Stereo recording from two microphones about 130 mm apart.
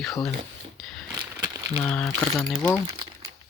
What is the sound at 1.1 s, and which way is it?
Crumpling, 30° right (ahead or behind).